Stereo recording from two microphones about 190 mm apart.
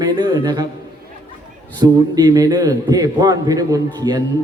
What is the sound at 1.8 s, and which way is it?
A man's voice, 20° right (ahead or behind).